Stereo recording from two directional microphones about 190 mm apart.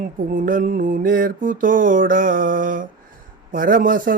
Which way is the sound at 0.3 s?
45° right (ahead or behind).